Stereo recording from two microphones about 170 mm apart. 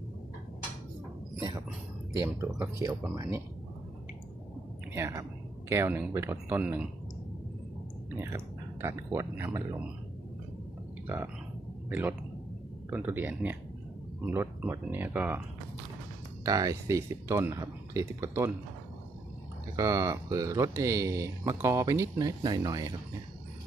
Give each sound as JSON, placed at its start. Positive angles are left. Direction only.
{"t": 2.2, "sound": "speech", "side_deg": -15}
{"t": 4.9, "sound": "speech", "side_deg": -15}
{"t": 8.1, "sound": "speech", "side_deg": -15}
{"t": 11.9, "sound": "speech", "side_deg": -10}
{"t": 16.4, "sound": "speech", "side_deg": -20}
{"t": 19.7, "sound": "speech", "side_deg": -20}